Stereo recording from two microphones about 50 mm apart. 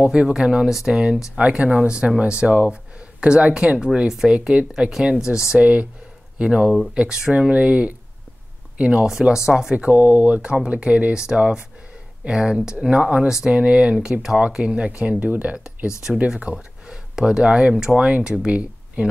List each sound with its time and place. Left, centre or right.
0.0 s speech: centre
5.6 s speech: right
9.8 s speech: right
13.3 s speech: centre
13.6 s speech: right
15.5 s speech: centre